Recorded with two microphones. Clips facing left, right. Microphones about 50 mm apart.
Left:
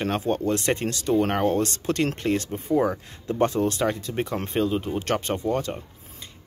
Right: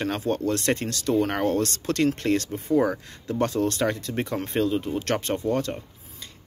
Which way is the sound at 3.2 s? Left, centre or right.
Left.